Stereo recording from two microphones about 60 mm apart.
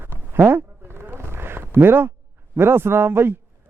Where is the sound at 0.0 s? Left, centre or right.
Right.